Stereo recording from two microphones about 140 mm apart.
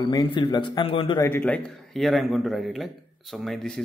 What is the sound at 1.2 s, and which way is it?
Speech, 15° left (ahead or behind).